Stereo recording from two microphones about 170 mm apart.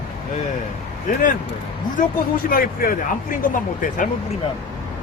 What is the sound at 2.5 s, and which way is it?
Speech, 55° left (ahead or behind).